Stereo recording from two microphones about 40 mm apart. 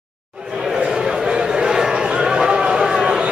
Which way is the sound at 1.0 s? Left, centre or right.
Centre.